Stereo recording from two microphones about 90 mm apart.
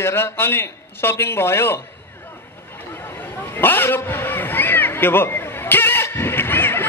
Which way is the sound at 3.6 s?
25° left (ahead or behind).